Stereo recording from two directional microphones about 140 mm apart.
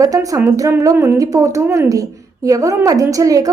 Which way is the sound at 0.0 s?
25° right (ahead or behind).